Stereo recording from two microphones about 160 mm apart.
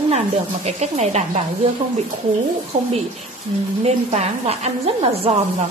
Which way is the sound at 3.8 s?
45° right (ahead or behind).